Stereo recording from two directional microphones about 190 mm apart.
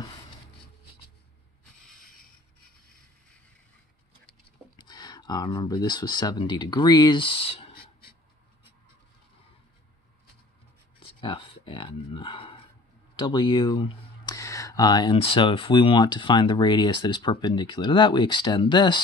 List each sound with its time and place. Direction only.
4.3 s speech: 20° left (ahead or behind)
11.0 s speech: 30° left (ahead or behind)